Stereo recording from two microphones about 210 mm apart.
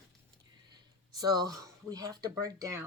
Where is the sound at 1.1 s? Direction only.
20° right (ahead or behind).